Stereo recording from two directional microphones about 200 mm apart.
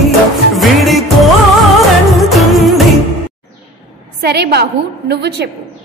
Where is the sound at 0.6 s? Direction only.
Centre (ahead or behind).